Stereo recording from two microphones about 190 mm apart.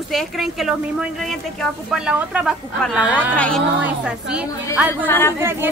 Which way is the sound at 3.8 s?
5° right (ahead or behind).